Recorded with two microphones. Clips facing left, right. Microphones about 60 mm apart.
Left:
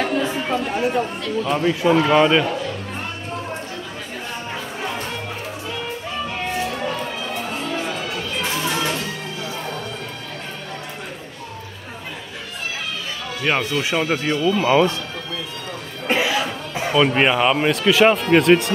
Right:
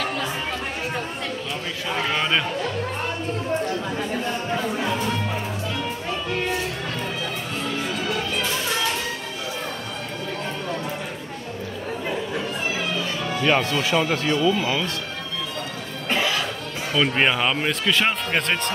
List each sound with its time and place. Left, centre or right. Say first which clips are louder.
1.6 s speech: left 11 dB; centre
2.1 s speech: left 6 dB; centre
13.4 s speech: even; centre
14.6 s speech: left 8 dB; left
16.1 s cough: left 4 dB; centre
16.9 s speech: left 4 dB; centre